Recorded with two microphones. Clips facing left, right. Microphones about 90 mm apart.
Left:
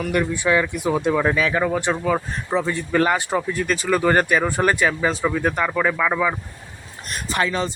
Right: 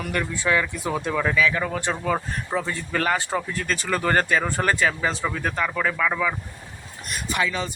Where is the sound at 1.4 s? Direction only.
35° left (ahead or behind).